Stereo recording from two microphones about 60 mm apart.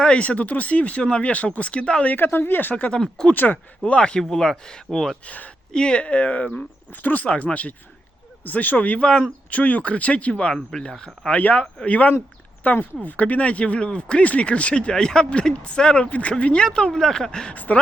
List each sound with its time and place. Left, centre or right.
0.0 s speech: left
2.1 s speech: left
3.0 s speech: centre
3.3 s speech: left
3.8 s speech: centre
5.2 s speech: left
9.0 s speech: centre
9.5 s speech: left
11.3 s speech: left
17.5 s speech: left